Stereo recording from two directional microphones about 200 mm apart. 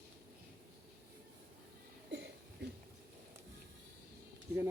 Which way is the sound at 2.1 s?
60° right (ahead or behind).